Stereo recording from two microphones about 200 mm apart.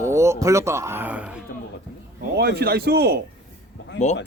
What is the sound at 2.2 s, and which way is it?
A man's voice, 50° right (ahead or behind).